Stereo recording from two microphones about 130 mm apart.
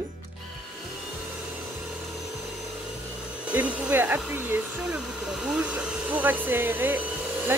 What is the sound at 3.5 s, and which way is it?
A woman's voice, 15° right (ahead or behind).